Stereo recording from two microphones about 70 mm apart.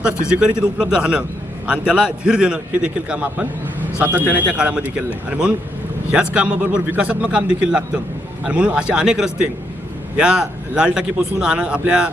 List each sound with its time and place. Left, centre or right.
0.3 s a man's voice: centre